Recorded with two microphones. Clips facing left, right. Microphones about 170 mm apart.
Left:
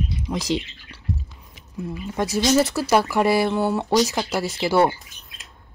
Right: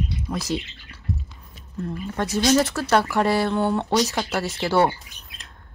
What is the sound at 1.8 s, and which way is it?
Speech, 10° left (ahead or behind).